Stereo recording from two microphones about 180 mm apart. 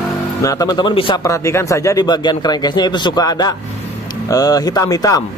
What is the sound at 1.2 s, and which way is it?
Speech, 15° left (ahead or behind).